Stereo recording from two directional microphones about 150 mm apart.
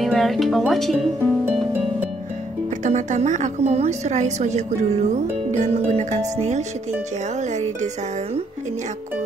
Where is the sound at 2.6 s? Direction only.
55° right (ahead or behind).